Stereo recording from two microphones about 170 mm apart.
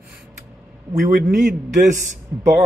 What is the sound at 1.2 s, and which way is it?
Speech, 50° right (ahead or behind).